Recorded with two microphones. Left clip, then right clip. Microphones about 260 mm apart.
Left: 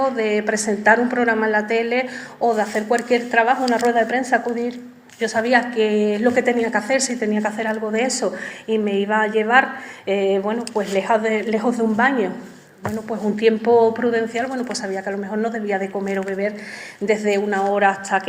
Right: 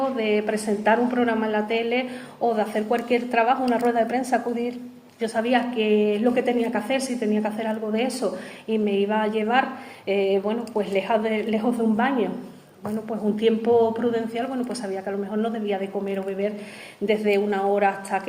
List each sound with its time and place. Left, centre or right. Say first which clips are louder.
0.0 s a woman's voice: left 4 dB; left
13.4 s a woman's voice: left 5 dB; left